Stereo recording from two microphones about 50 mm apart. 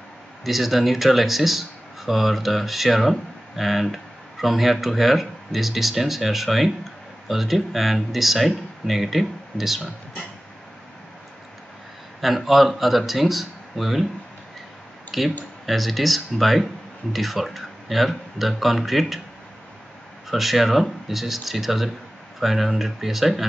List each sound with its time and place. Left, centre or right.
0.4 s speech: centre
12.2 s speech: centre
15.0 s speech: centre
20.2 s speech: centre